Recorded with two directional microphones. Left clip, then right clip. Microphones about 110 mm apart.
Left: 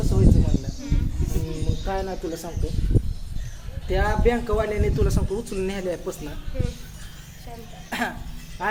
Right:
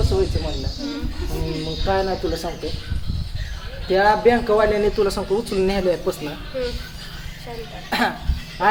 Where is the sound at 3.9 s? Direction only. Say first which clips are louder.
Right 7 dB; 10° left (ahead or behind).